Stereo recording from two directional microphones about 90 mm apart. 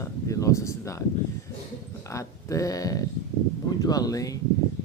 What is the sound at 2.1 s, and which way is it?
Speech, 35° left (ahead or behind).